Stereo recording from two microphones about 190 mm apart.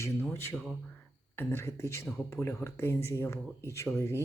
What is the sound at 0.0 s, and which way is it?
Speech, 15° left (ahead or behind).